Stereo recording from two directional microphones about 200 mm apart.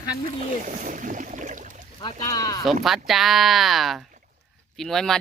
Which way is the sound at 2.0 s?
20° left (ahead or behind).